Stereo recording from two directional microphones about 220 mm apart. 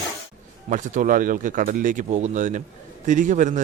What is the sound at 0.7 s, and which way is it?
A man's voice, 35° right (ahead or behind).